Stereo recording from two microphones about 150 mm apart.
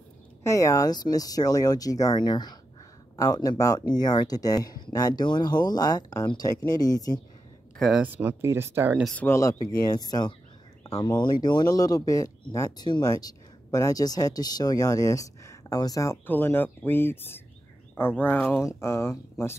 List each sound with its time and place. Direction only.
0.4 s speech: 20° left (ahead or behind)
7.8 s speech: 5° right (ahead or behind)
9.0 s speech: 10° left (ahead or behind)
9.4 s speech: 25° left (ahead or behind)